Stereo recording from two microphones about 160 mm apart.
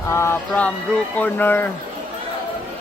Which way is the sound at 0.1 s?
15° left (ahead or behind).